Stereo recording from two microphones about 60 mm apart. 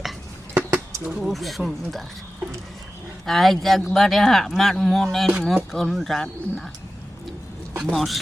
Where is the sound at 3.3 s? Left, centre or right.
Centre.